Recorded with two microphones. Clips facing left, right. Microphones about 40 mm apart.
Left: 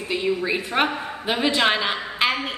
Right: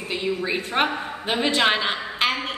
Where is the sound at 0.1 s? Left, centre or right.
Centre.